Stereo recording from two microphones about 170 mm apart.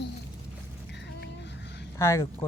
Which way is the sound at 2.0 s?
15° left (ahead or behind).